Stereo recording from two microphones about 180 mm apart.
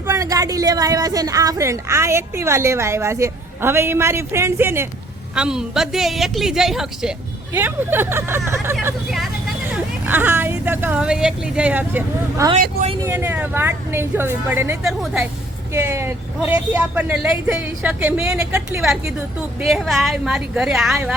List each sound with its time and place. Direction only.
0.1 s a woman's voice: 20° right (ahead or behind)
10.1 s a woman's voice: 10° right (ahead or behind)
15.7 s a woman's voice: 15° right (ahead or behind)